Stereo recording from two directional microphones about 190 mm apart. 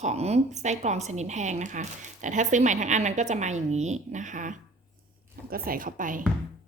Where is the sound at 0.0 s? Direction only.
35° right (ahead or behind).